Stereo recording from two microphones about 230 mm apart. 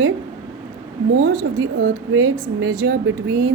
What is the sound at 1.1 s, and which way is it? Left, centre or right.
A woman's voice, right.